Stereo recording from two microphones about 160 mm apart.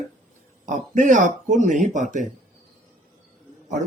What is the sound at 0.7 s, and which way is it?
Speech, 50° right (ahead or behind).